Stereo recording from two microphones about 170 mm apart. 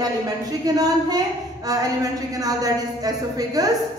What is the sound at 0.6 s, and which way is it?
Speech, 20° right (ahead or behind).